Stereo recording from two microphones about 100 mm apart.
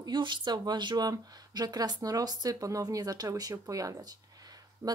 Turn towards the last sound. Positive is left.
turn(degrees=-35)  # may be behind; listen again after turning